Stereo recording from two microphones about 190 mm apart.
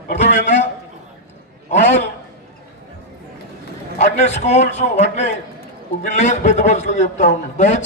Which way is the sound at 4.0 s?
35° left (ahead or behind).